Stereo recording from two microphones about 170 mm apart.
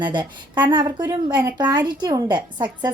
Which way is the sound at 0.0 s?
25° right (ahead or behind).